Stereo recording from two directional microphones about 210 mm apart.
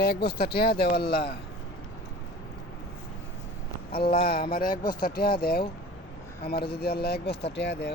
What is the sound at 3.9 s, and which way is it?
Speech, 45° left (ahead or behind).